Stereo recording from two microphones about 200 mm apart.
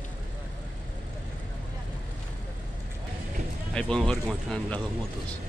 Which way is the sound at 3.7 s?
5° left (ahead or behind).